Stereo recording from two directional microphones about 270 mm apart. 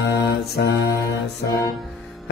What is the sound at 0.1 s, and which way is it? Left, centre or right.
Mantra, left.